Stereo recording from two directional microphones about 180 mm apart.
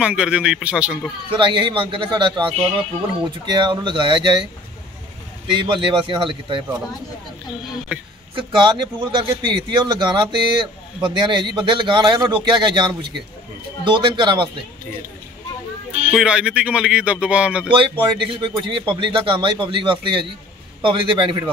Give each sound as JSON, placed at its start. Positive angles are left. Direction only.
{"t": 0.0, "sound": "speech", "side_deg": -5}
{"t": 1.3, "sound": "speech", "side_deg": -25}
{"t": 5.5, "sound": "speech", "side_deg": -30}
{"t": 8.4, "sound": "speech", "side_deg": -30}
{"t": 16.1, "sound": "speech", "side_deg": -5}
{"t": 17.6, "sound": "speech", "side_deg": -30}